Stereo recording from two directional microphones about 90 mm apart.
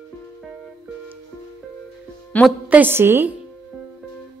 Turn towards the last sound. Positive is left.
turn(degrees=-25)  # may be behind; listen again after turning